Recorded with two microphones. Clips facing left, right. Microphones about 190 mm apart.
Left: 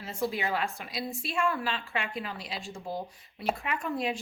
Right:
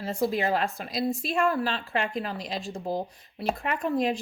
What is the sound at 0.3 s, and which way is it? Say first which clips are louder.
A woman's voice: right 5 dB; 35° right (ahead or behind).